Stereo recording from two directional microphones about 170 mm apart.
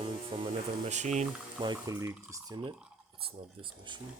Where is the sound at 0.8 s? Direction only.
45° right (ahead or behind).